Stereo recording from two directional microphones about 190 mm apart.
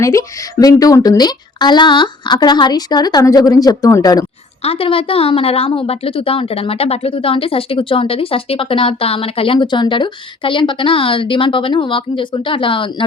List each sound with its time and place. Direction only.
0.0 s a woman's voice: 15° left (ahead or behind)
4.6 s a woman's voice: 30° left (ahead or behind)